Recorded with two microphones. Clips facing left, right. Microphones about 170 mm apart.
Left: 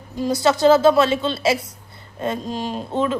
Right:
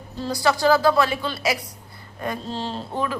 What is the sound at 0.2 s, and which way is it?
Speech, 20° left (ahead or behind).